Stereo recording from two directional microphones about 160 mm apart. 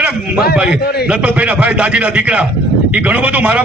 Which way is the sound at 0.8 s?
80° left.